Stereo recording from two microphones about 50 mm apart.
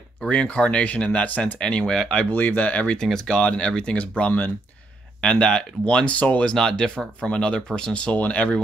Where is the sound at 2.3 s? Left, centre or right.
Left.